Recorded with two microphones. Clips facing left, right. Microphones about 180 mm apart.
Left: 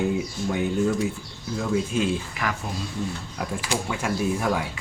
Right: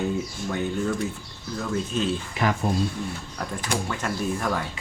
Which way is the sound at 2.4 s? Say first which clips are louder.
Right 4 dB; 30° right (ahead or behind).